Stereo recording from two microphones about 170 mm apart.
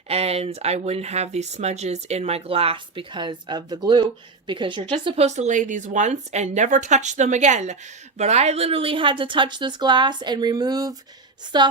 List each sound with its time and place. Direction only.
0.1 s speech: 35° right (ahead or behind)
5.2 s a woman's voice: 40° right (ahead or behind); by 11.7 s 25° right (ahead or behind)